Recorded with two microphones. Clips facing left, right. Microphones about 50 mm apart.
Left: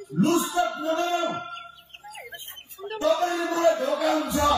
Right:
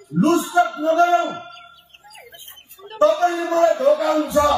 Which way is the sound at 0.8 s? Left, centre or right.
Right.